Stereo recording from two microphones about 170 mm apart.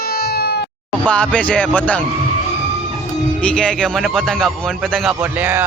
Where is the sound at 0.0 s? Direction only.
65° left (ahead or behind).